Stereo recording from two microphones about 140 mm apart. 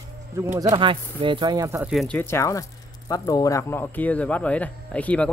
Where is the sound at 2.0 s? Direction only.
10° left (ahead or behind).